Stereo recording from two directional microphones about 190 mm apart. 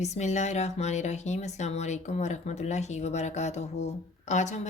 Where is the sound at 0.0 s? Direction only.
35° left (ahead or behind).